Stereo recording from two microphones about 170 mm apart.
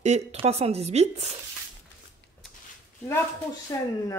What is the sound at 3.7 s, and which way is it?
Speech, 20° left (ahead or behind).